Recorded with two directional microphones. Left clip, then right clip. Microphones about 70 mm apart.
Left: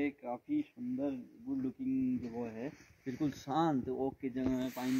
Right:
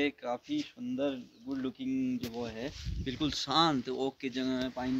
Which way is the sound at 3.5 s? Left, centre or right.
Left.